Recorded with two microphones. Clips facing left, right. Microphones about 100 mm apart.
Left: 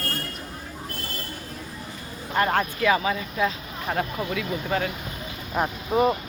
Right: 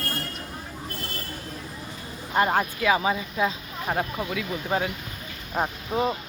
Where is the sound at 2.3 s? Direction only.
15° right (ahead or behind).